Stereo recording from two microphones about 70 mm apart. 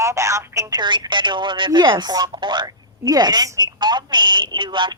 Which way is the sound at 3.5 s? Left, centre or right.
Right.